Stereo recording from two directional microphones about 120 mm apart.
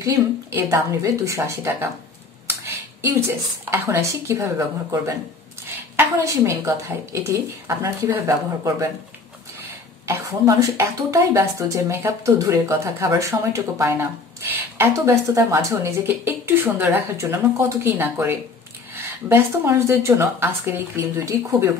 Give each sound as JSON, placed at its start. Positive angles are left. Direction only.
{"t": 0.0, "sound": "speech", "side_deg": -25}
{"t": 3.3, "sound": "speech", "side_deg": -20}
{"t": 10.0, "sound": "speech", "side_deg": -25}